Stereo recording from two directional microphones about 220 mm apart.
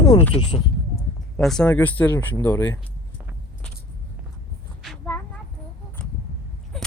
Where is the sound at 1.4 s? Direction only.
Centre (ahead or behind).